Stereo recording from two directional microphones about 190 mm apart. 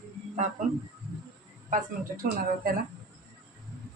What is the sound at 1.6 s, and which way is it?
Speech, 45° right (ahead or behind).